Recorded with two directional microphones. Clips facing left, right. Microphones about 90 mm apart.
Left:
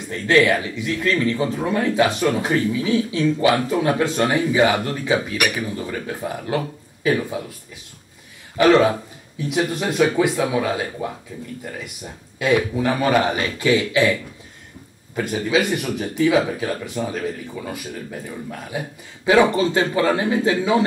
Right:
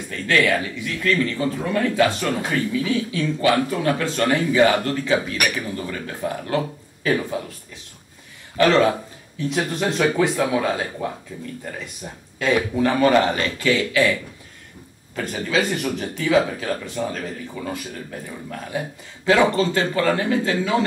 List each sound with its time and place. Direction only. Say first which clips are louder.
0.1 s speech: left 3 dB; 20° left (ahead or behind)
8.5 s speech: left 2 dB; 15° left (ahead or behind)
9.8 s speech: left 1 dB; 10° left (ahead or behind)
12.4 s speech: left 1 dB; 10° left (ahead or behind)
15.1 s speech: left 2 dB; 15° left (ahead or behind)
19.2 s speech: left 2 dB; 15° left (ahead or behind)